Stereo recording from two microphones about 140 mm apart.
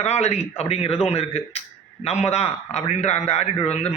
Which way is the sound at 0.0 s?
50° left (ahead or behind).